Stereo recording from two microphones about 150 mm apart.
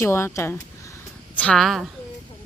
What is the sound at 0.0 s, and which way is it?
Speech, 15° left (ahead or behind).